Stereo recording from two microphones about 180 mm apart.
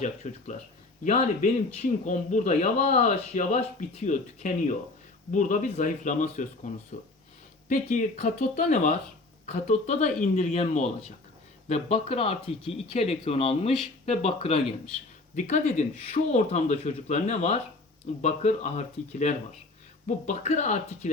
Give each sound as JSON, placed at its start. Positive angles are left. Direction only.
{"t": 0.0, "sound": "a man's voice", "side_deg": 40}